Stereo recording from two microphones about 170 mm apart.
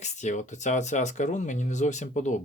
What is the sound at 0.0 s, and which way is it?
Speech, 45° left (ahead or behind).